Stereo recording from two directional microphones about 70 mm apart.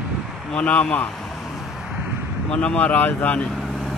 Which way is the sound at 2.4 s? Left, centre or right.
Centre.